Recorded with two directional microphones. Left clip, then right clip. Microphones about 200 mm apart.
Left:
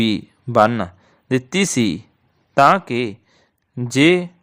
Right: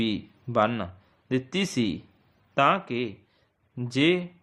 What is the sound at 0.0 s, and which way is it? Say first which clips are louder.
A man's voice: left 9 dB; 40° left (ahead or behind).